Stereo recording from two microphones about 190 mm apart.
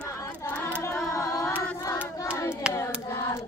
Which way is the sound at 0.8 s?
15° left (ahead or behind).